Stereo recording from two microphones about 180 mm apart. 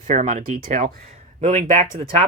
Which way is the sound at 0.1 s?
45° right (ahead or behind).